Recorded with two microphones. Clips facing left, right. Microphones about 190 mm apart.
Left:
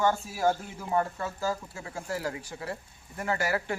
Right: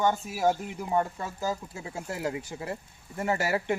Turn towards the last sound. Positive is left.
turn(degrees=-25)  # may be behind; listen again after turning